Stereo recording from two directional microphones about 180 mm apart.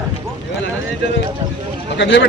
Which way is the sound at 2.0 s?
90° left.